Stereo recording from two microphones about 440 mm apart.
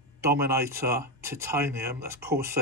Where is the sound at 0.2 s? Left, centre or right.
Centre.